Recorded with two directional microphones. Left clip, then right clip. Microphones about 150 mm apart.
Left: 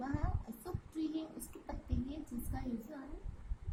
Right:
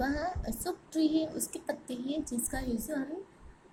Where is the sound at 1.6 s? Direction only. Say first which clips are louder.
Right 7 dB; 20° right (ahead or behind).